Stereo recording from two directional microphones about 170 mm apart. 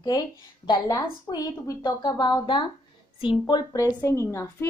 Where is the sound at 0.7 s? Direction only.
20° left (ahead or behind).